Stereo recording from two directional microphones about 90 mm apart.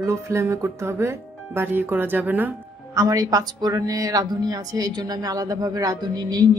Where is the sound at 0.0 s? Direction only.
30° right (ahead or behind).